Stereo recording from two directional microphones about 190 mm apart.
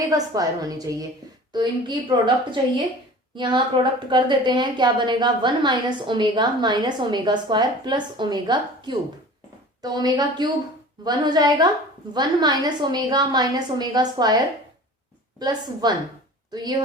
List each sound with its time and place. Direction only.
0.1 s a woman's voice: 20° right (ahead or behind)
2.0 s a woman's voice: 25° right (ahead or behind)
15.4 s a woman's voice: 20° right (ahead or behind)